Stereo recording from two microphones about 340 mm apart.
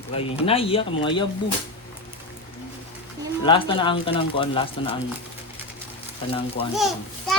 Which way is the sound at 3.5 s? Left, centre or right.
Centre.